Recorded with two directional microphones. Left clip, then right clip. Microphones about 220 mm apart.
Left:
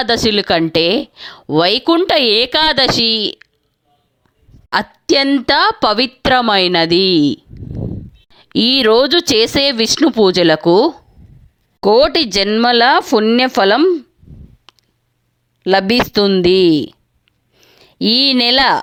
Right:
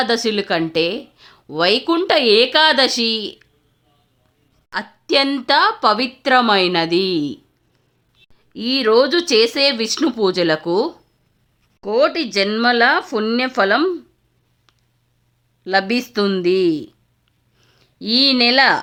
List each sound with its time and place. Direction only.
0.0 s speech: 35° left (ahead or behind)
4.7 s a woman's voice: 30° left (ahead or behind)
5.5 s speech: 35° left (ahead or behind)
14.7 s a sound: 35° left (ahead or behind)
15.6 s speech: 35° left (ahead or behind)
17.5 s a sound: 25° left (ahead or behind)
17.7 s speech: 35° left (ahead or behind)